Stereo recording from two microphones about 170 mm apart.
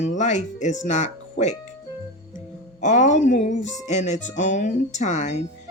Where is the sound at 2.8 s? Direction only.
45° left (ahead or behind).